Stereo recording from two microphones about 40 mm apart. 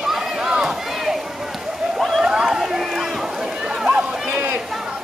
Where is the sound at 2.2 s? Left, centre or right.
Centre.